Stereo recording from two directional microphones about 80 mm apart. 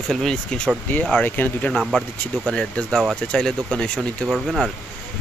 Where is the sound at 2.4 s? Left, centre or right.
Centre.